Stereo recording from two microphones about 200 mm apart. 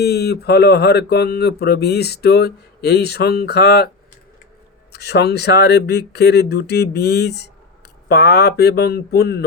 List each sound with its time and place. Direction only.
0.0 s mantra: 55° left (ahead or behind)
4.9 s speech: 55° left (ahead or behind)
8.0 s mantra: 55° left (ahead or behind)